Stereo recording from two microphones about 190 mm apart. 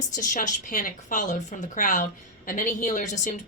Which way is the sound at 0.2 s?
45° left (ahead or behind).